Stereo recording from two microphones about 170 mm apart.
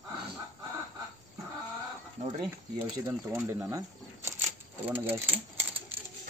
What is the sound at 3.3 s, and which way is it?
Speech, 15° right (ahead or behind).